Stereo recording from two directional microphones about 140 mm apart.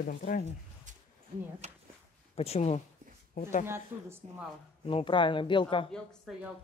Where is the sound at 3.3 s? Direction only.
65° left (ahead or behind).